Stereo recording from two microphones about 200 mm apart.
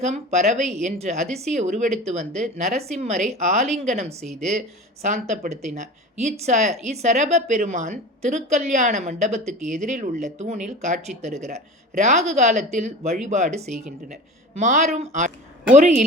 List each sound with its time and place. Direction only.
0.0 s speech: 35° right (ahead or behind)
4.2 s speech: centre (ahead or behind)
5.0 s speech: 35° right (ahead or behind)